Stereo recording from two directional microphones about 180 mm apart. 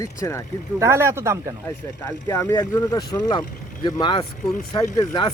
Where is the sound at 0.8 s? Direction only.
15° right (ahead or behind).